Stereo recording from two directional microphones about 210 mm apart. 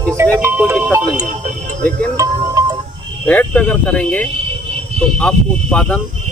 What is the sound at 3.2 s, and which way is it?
Speech, 5° left (ahead or behind).